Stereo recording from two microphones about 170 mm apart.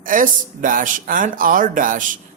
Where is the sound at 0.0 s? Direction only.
50° right (ahead or behind).